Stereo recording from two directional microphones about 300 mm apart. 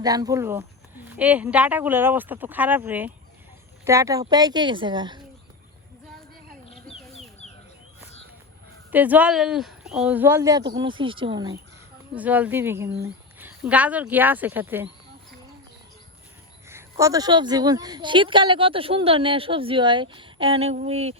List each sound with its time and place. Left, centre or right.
0.0 s speech: centre
6.7 s bird: centre
8.9 s speech: centre
16.9 s speech: centre